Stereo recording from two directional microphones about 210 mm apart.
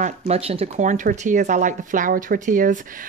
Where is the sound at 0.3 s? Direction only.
30° right (ahead or behind).